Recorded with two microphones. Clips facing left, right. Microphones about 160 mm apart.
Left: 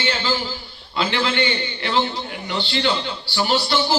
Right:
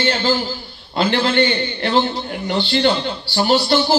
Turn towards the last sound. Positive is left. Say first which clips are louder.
# right 5 dB
turn(degrees=-45)  # may be behind; listen again after turning